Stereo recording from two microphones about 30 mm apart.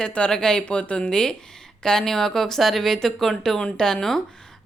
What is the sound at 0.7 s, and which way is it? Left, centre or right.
Speech, left.